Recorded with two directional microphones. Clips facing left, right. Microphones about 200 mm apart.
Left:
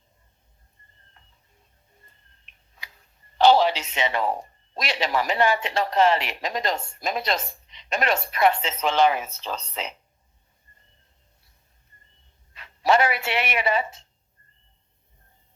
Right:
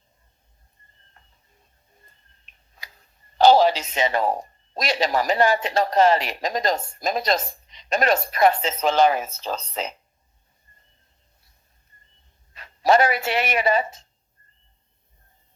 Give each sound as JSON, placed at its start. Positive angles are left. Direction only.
{"t": 2.5, "sound": "tick-tock", "side_deg": -40}
{"t": 3.3, "sound": "speech", "side_deg": -40}
{"t": 12.5, "sound": "speech", "side_deg": -40}